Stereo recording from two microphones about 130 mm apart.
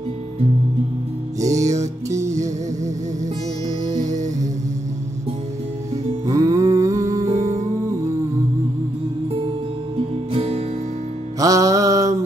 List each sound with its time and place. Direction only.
1.4 s music: 25° right (ahead or behind)
6.2 s humming: 25° right (ahead or behind)
10.3 s music: 50° right (ahead or behind)
11.3 s mantra: 25° right (ahead or behind)